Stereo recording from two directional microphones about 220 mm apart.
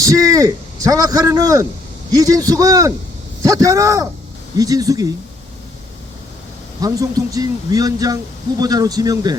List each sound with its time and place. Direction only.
0.0 s speech: 15° right (ahead or behind)
6.8 s speech: 15° right (ahead or behind)